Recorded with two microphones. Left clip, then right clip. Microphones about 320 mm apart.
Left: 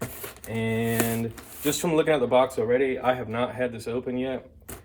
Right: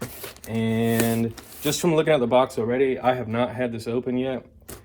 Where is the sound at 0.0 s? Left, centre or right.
Centre.